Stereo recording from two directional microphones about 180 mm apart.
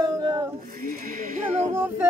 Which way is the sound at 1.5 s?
35° right (ahead or behind).